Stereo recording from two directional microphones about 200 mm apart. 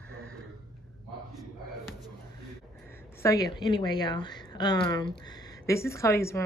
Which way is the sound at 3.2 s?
15° left (ahead or behind).